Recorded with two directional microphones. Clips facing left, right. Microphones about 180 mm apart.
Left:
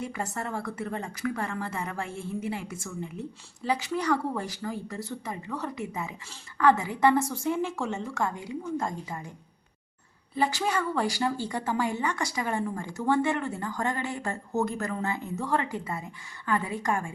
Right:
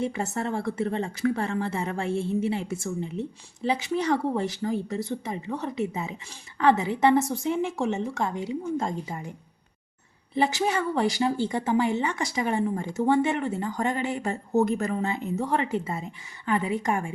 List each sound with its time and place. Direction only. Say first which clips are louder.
0.0 s a woman's voice: right 5 dB; 25° right (ahead or behind)
10.3 s a woman's voice: right 3 dB; 20° right (ahead or behind)